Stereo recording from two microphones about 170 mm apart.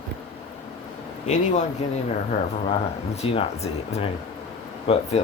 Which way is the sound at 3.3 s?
35° left (ahead or behind).